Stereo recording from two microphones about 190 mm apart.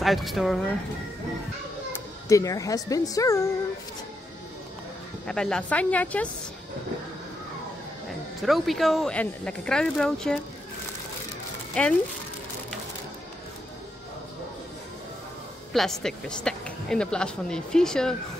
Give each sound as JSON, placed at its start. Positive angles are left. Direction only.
{"t": 0.0, "sound": "speech", "side_deg": 0}
{"t": 1.9, "sound": "a child's voice", "side_deg": 15}
{"t": 5.2, "sound": "speech", "side_deg": 5}
{"t": 8.4, "sound": "speech", "side_deg": 0}
{"t": 11.7, "sound": "speech", "side_deg": 5}
{"t": 15.7, "sound": "speech", "side_deg": 0}